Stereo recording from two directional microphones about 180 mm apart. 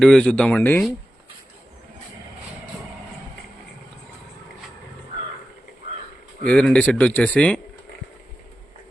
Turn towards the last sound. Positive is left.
turn(degrees=5)  # may be behind; listen again after turning